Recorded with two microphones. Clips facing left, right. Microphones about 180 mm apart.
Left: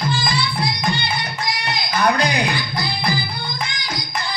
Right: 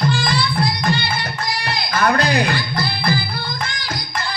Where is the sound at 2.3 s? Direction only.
55° right (ahead or behind).